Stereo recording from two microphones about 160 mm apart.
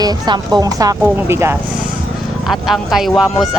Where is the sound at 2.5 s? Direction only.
Centre (ahead or behind).